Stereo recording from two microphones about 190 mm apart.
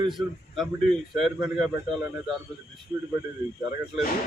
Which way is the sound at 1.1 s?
Centre (ahead or behind).